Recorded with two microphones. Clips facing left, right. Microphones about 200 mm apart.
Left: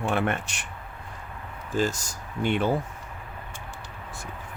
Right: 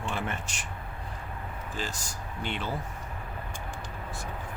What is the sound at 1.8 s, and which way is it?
Speech, 45° left (ahead or behind).